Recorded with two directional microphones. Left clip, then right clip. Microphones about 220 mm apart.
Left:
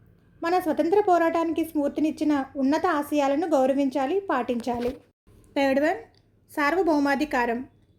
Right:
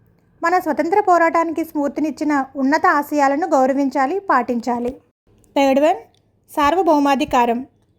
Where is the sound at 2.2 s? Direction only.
30° right (ahead or behind).